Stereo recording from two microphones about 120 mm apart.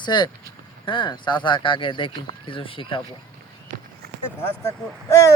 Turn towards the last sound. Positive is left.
turn(degrees=25)  # may be behind; listen again after turning